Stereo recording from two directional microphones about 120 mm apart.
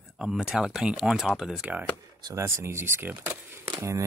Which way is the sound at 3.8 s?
25° right (ahead or behind).